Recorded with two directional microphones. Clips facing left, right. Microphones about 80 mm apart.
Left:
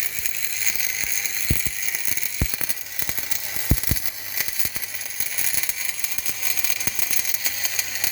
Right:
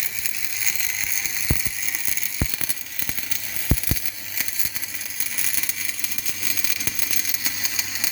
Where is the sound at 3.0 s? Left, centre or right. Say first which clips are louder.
Even; centre.